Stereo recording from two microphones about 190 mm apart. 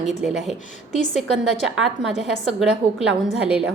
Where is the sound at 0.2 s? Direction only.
Centre (ahead or behind).